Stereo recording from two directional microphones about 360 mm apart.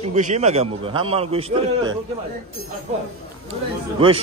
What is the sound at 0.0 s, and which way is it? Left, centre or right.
A man's voice, centre.